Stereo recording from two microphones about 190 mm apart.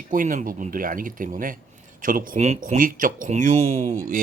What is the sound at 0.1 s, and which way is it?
Speech, 45° right (ahead or behind).